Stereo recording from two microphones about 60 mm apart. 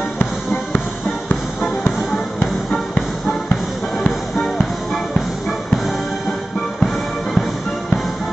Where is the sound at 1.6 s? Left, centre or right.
Centre.